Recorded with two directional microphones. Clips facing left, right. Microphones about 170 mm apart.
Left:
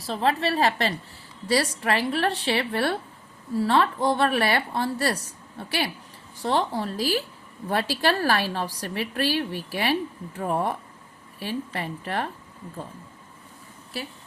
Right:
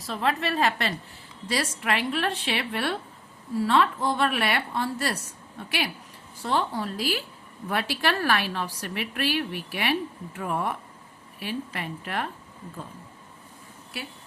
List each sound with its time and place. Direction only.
0.0 s a woman's voice: 30° left (ahead or behind)